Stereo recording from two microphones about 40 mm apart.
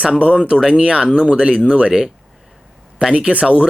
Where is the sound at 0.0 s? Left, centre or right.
Right.